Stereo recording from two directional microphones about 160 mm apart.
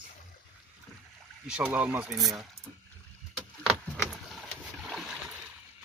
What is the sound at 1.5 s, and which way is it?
Speech, 10° right (ahead or behind).